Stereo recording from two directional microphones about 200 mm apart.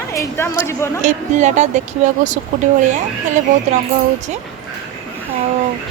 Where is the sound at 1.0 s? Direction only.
35° right (ahead or behind).